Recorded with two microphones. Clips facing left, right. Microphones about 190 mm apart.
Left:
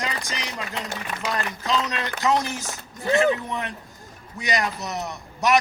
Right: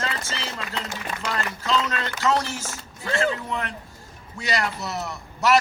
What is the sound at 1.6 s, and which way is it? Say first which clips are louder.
A man's voice: right 2 dB; 20° left (ahead or behind).